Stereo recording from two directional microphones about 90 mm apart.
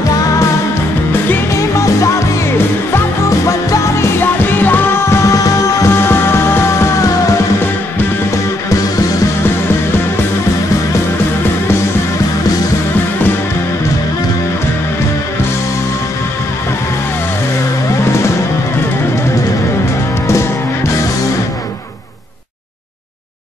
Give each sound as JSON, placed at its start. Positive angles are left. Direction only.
{"t": 1.5, "sound": "music", "side_deg": 35}
{"t": 20.2, "sound": "music", "side_deg": 30}